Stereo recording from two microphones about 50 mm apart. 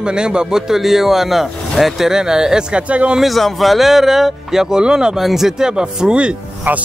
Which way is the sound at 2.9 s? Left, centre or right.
Right.